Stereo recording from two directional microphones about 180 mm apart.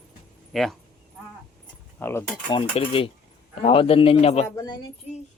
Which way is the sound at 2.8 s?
30° left (ahead or behind).